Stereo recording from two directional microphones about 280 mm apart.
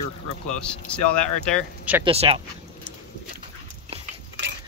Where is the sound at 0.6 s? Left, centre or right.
Centre.